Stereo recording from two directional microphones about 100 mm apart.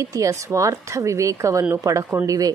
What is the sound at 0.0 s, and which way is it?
Speech, 35° right (ahead or behind).